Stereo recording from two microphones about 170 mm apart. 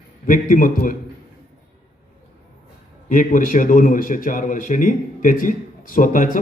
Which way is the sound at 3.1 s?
50° left (ahead or behind).